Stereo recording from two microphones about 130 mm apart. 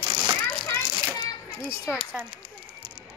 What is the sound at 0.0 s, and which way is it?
Children playing, 35° right (ahead or behind).